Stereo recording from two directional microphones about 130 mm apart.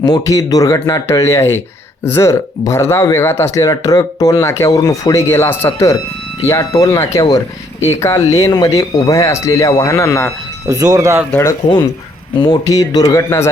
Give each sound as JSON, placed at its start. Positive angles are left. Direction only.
{"t": 0.0, "sound": "speech", "side_deg": 30}
{"t": 10.7, "sound": "speech", "side_deg": -25}
{"t": 12.4, "sound": "speech", "side_deg": 30}